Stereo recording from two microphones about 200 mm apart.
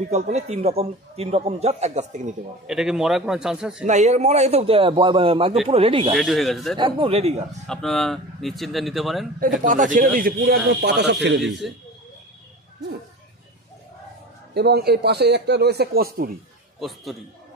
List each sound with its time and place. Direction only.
0.1 s a man's voice: 35° right (ahead or behind)
2.6 s speech: centre (ahead or behind)
3.8 s a man's voice: 35° right (ahead or behind)
6.1 s speech: centre (ahead or behind)
6.8 s a man's voice: 25° right (ahead or behind)
7.6 s speech: centre (ahead or behind)
9.6 s a man's voice: 40° right (ahead or behind)
10.4 s speech: 55° right (ahead or behind)
11.6 s speech: centre (ahead or behind)
14.5 s speech: 55° right (ahead or behind)
16.8 s speech: centre (ahead or behind)